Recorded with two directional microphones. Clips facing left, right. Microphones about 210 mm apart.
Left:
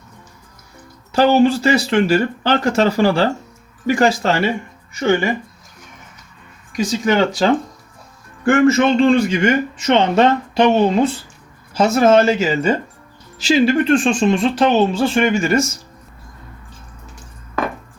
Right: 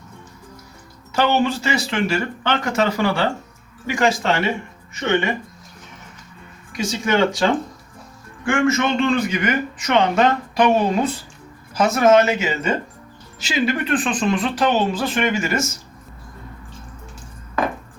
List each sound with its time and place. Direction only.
1.1 s speech: 35° left (ahead or behind)
6.7 s speech: 35° left (ahead or behind)